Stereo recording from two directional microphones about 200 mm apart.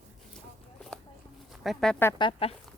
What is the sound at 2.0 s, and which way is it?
Speech, 20° left (ahead or behind).